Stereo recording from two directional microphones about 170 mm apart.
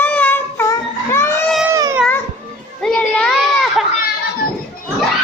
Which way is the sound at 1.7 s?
15° right (ahead or behind).